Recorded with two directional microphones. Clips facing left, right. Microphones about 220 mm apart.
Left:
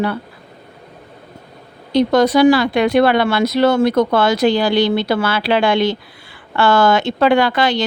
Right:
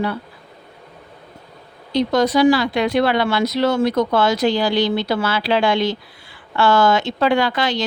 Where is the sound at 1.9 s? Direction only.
60° left (ahead or behind).